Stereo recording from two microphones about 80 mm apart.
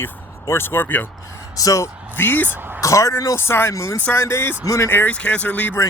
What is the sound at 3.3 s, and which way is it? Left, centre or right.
Speech, left.